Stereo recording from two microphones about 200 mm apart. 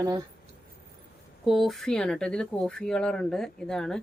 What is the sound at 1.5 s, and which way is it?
Speech, centre (ahead or behind).